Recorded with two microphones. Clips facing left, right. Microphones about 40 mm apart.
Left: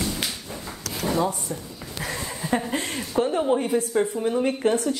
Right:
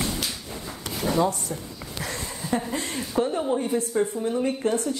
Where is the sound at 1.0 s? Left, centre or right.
Centre.